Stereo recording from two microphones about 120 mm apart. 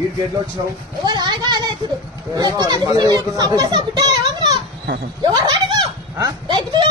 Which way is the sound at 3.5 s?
35° right (ahead or behind).